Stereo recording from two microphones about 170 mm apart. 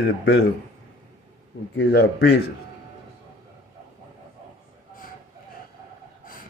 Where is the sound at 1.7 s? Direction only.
80° left.